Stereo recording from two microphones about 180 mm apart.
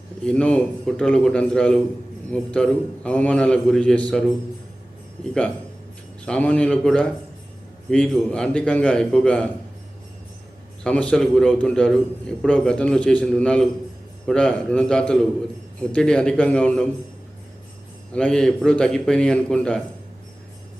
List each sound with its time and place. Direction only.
0.3 s a man's voice: 5° left (ahead or behind)
6.2 s a man's voice: 5° left (ahead or behind)
10.8 s a man's voice: 5° left (ahead or behind)
18.1 s a man's voice: 5° left (ahead or behind)